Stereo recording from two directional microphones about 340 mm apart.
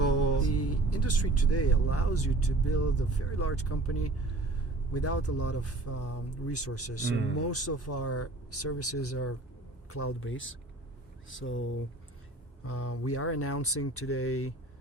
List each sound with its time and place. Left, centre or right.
0.0 s speech: left